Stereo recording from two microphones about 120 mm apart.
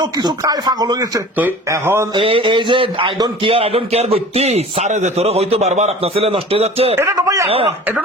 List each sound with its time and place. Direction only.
0.0 s speech: 35° right (ahead or behind)
1.7 s speech: 20° right (ahead or behind)
2.1 s a sound: 45° right (ahead or behind)
3.4 s a man's voice: 50° right (ahead or behind)
6.9 s speech: 20° right (ahead or behind)
7.4 s a sound: 55° right (ahead or behind)